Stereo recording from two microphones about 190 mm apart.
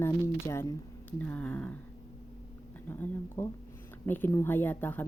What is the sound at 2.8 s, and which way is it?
Speech, 10° left (ahead or behind).